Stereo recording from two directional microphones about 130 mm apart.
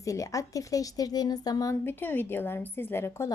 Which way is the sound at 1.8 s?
15° left (ahead or behind).